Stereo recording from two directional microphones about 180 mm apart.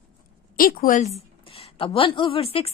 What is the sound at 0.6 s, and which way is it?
Speech, 50° left (ahead or behind).